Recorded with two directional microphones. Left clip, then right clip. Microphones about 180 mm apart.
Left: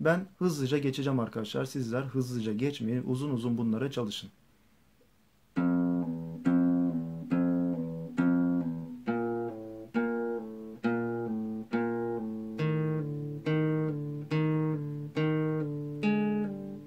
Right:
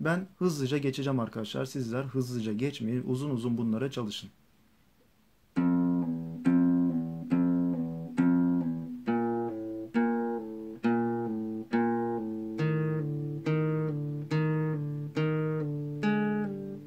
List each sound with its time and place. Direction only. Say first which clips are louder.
0.0 s speech: left 2 dB; 5° left (ahead or behind)
5.5 s music: right 1 dB; 20° right (ahead or behind)
9.9 s guitar: right 1 dB; 15° right (ahead or behind)
14.3 s music: left 1 dB; 20° right (ahead or behind)